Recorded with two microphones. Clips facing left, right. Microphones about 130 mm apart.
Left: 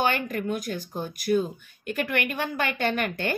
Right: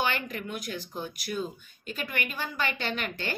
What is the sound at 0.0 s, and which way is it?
Speech, 45° left (ahead or behind).